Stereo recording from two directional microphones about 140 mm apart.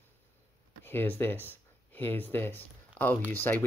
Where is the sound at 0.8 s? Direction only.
15° left (ahead or behind).